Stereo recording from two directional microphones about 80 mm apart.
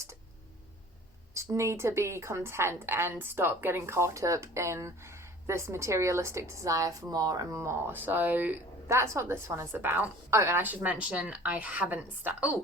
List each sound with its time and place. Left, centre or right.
1.3 s a woman's voice: right
8.9 s a woman's voice: right; by 12.5 s centre